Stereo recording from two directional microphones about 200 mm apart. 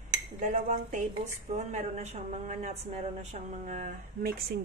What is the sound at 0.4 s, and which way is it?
A woman's voice, 35° right (ahead or behind).